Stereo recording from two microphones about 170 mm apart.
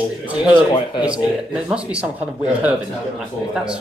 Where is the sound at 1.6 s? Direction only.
5° right (ahead or behind).